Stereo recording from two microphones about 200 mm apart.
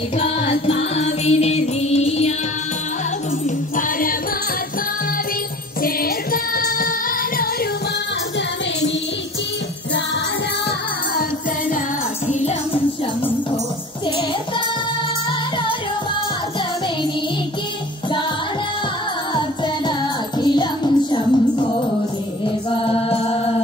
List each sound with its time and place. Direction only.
0.2 s music: 30° left (ahead or behind)
3.4 s music: 40° left (ahead or behind)
5.8 s music: 45° left (ahead or behind)
12.3 s music: 35° left (ahead or behind)
19.3 s music: 25° left (ahead or behind)
22.4 s mantra: 25° left (ahead or behind)